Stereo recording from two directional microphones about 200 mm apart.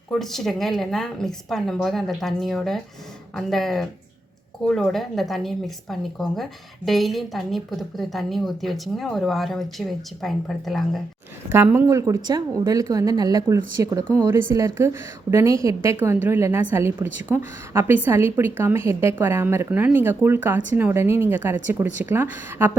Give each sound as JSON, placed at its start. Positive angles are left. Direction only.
{"t": 0.1, "sound": "speech", "side_deg": 0}
{"t": 11.5, "sound": "a woman's voice", "side_deg": -10}